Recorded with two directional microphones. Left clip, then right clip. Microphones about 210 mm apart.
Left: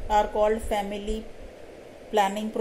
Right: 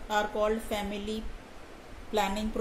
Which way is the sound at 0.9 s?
45° right (ahead or behind).